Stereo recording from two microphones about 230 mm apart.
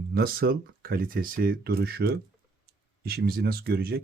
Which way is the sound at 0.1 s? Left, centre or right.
Right.